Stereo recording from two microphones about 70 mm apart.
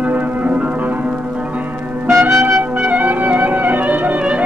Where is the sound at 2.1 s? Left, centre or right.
Right.